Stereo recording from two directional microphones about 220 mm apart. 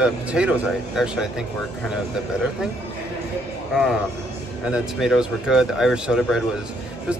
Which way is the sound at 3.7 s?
Centre (ahead or behind).